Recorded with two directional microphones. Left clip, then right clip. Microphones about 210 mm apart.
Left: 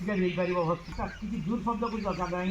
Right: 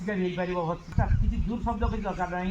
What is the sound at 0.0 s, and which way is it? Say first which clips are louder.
A man's voice: left 1 dB; centre (ahead or behind).